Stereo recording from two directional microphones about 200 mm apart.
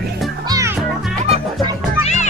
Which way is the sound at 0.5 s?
15° right (ahead or behind).